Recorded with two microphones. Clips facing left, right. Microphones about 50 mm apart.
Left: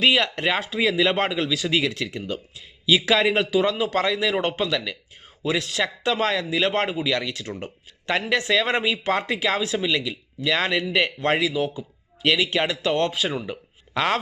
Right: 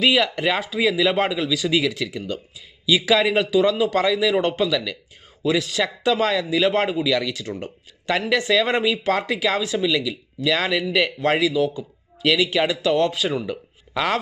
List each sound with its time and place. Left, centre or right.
0.0 s speech: centre
8.8 s speech: centre